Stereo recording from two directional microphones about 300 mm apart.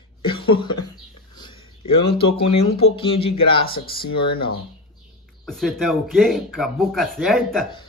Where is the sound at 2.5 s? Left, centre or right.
Centre.